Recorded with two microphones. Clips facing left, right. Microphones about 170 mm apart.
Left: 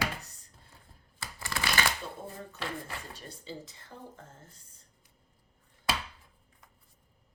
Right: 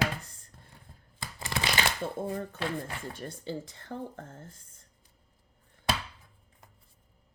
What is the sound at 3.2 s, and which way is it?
Speech, 55° right (ahead or behind).